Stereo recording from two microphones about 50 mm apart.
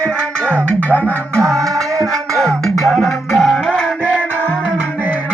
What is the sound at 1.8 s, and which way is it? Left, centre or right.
Music, right.